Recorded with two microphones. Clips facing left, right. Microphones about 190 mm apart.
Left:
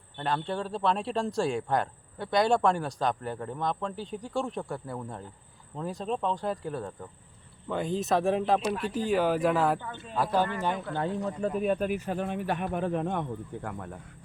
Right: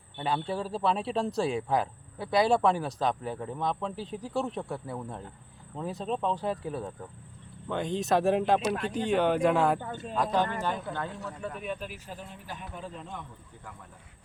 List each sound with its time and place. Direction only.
0.2 s speech: 5° right (ahead or behind)
9.8 s speech: 40° right (ahead or behind)
10.2 s speech: 5° left (ahead or behind)
10.9 s speech: 30° left (ahead or behind)
11.6 s speech: 50° left (ahead or behind)